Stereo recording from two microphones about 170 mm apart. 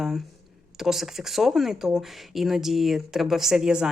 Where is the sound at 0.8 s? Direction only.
Centre (ahead or behind).